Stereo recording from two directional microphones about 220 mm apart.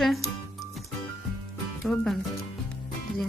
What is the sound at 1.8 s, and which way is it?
Speech, centre (ahead or behind).